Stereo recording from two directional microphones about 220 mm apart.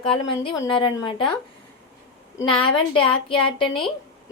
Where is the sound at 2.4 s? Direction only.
25° left (ahead or behind).